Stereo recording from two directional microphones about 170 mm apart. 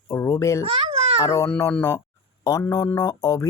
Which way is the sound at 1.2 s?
20° left (ahead or behind).